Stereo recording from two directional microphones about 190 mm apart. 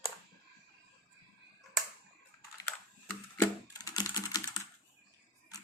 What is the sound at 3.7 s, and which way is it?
Typing, 20° left (ahead or behind).